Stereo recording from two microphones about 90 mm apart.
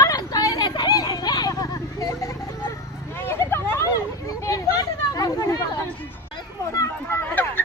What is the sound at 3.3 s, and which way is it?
Vehicle, 25° left (ahead or behind).